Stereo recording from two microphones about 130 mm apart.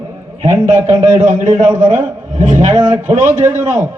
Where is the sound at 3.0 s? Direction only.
70° right (ahead or behind).